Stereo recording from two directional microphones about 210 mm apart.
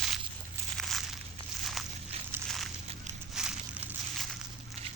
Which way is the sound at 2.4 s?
Centre (ahead or behind).